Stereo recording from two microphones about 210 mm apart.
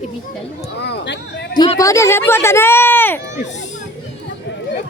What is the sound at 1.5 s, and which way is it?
Speech, 20° left (ahead or behind).